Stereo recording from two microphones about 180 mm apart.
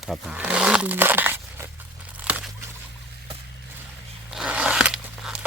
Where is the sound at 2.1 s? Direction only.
10° right (ahead or behind).